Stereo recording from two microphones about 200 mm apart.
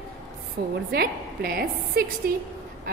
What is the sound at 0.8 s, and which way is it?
A woman's voice, 50° right (ahead or behind).